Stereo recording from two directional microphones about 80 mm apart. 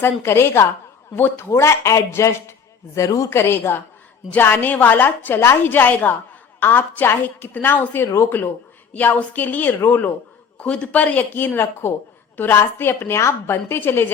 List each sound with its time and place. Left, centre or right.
0.0 s a man's voice: left
3.2 s a woman's voice: left